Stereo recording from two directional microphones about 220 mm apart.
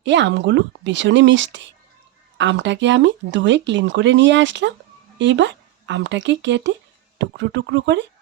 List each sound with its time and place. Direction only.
0.0 s speech: 55° right (ahead or behind)